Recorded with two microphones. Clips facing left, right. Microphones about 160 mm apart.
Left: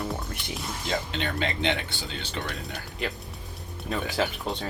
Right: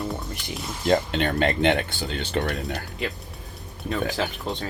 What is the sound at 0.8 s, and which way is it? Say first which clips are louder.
Speech: right 9 dB; 55° right (ahead or behind).